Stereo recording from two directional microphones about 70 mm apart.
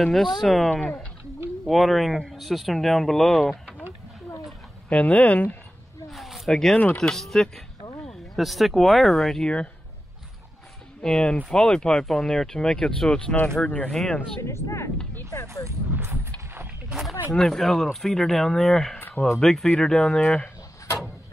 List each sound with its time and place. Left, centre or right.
0.0 s speech: centre
0.7 s speech: centre
1.7 s speech: centre
4.8 s speech: left
6.0 s a sound: centre
6.5 s speech: centre
11.0 s speech: centre
14.4 s speech: left
15.9 s speech: right
17.3 s speech: centre
18.9 s a sound: left
19.4 s speech: centre